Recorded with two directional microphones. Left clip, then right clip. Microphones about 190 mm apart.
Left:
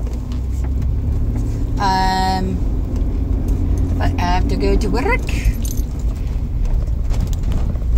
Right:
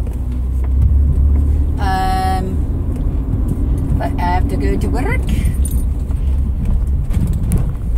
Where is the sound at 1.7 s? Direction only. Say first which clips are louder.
Left 1 dB; 15° left (ahead or behind).